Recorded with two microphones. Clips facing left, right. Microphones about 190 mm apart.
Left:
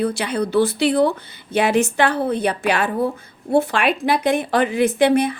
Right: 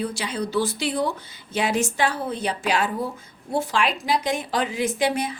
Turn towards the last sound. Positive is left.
turn(degrees=60)  # may be behind; listen again after turning